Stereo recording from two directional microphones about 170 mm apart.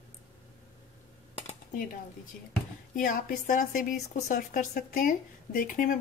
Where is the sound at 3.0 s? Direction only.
55° left (ahead or behind).